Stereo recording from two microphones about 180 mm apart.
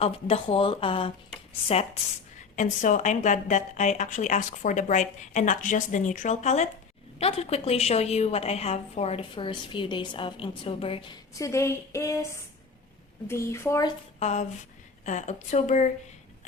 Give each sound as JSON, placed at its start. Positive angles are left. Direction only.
{"t": 0.0, "sound": "a woman's voice", "side_deg": 35}
{"t": 14.2, "sound": "a woman's voice", "side_deg": 40}